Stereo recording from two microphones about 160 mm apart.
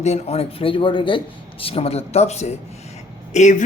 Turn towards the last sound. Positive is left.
turn(degrees=50)  # may be behind; listen again after turning